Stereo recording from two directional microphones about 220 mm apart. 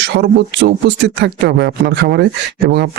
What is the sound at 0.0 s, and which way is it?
Speech, 55° right (ahead or behind).